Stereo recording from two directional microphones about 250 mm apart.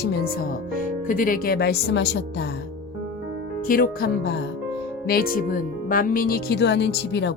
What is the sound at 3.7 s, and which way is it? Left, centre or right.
Speech, left.